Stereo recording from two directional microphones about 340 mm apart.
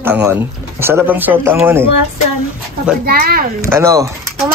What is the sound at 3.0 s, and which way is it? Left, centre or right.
Speech, right.